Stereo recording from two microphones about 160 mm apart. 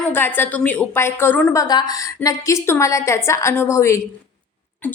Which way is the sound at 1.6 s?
25° left (ahead or behind).